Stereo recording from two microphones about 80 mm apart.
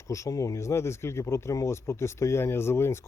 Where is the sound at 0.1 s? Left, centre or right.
Left.